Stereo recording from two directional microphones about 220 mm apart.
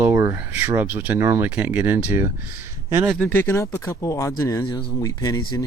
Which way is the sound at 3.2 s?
10° left (ahead or behind).